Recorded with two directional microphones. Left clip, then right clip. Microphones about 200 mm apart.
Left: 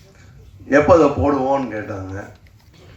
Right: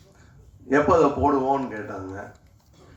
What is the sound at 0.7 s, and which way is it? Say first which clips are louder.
Speech: left 6 dB; 80° right.